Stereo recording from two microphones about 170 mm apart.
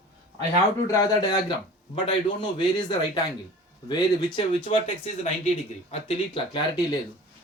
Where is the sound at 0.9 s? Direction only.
20° left (ahead or behind).